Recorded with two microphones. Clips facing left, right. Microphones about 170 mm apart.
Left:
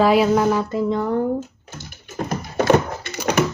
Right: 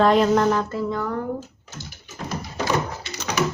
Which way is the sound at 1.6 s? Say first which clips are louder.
Left 2 dB; 55° left (ahead or behind).